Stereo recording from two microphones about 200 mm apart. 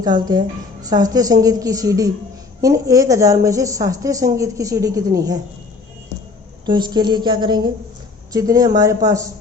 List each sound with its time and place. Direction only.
0.0 s a woman's voice: 20° right (ahead or behind)
6.7 s a woman's voice: 20° right (ahead or behind)